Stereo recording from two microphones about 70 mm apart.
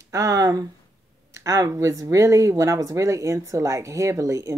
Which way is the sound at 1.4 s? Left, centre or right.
Right.